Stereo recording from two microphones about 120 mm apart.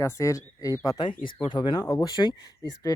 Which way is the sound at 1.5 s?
40° left (ahead or behind).